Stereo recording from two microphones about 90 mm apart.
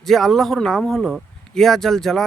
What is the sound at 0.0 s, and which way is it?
Speech, centre (ahead or behind).